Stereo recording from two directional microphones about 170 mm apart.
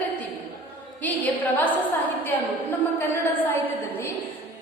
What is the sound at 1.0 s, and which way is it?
A woman's voice, 10° left (ahead or behind).